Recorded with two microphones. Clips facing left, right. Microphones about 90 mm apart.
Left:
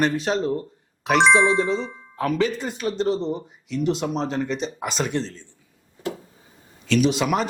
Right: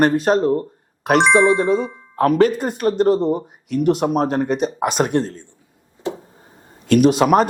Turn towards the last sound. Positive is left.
turn(degrees=-45)  # may be behind; listen again after turning